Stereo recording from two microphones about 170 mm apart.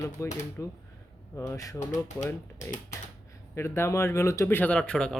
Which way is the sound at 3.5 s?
15° left (ahead or behind).